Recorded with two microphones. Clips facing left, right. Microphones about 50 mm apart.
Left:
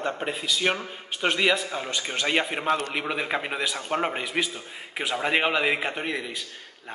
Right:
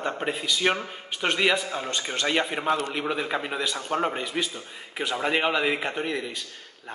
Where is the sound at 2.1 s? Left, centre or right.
Centre.